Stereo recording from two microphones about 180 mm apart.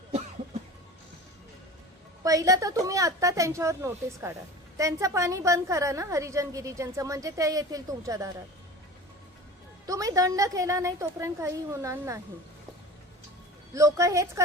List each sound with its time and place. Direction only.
2.2 s a woman's voice: 20° right (ahead or behind)
9.8 s a woman's voice: 20° right (ahead or behind)
13.7 s a woman's voice: 15° right (ahead or behind)